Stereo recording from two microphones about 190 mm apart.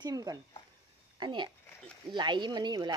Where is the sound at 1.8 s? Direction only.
5° left (ahead or behind).